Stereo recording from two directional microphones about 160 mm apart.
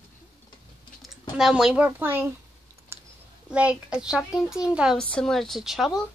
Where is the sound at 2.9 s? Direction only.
15° right (ahead or behind).